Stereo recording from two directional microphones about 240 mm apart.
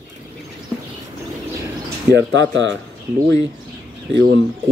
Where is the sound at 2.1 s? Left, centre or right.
Right.